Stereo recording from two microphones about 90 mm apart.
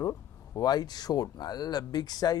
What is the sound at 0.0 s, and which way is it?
Speech, 45° left (ahead or behind).